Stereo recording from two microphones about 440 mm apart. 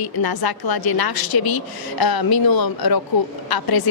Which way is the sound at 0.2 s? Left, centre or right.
Left.